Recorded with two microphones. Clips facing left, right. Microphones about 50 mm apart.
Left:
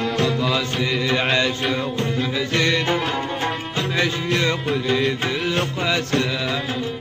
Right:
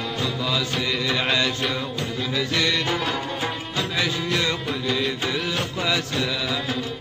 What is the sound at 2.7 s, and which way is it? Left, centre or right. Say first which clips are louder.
Music: left 4 dB; centre.